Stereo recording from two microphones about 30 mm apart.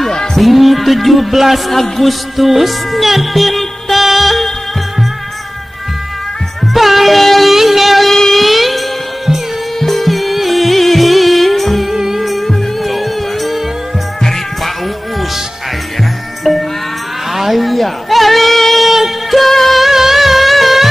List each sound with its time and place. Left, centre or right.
0.1 s a sound: left
0.4 s music: centre
1.7 s speech: centre
2.3 s music: centre
6.6 s music: centre
8.1 s a sound: centre
8.5 s music: centre
11.9 s music: centre
12.3 s music: centre
16.5 s music: centre
17.3 s a sound: centre
18.9 s music: centre
19.3 s music of bollywood: centre
19.8 s music: centre